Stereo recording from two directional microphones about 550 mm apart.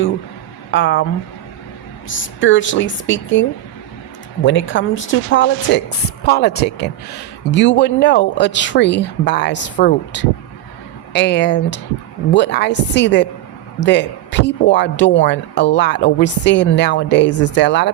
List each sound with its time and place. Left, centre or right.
0.7 s a man's voice: left
2.0 s a man's voice: left
4.4 s a man's voice: centre